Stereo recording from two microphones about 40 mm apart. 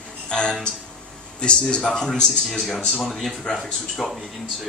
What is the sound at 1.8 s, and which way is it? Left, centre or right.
A man's voice, centre.